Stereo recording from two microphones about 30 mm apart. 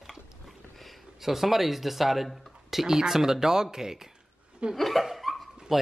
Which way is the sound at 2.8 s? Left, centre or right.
Centre.